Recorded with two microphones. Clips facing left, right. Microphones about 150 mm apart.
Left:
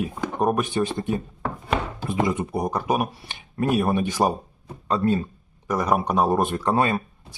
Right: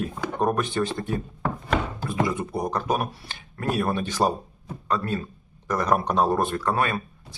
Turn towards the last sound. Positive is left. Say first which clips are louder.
# left 4 dB
turn(degrees=20)  # may be behind; listen again after turning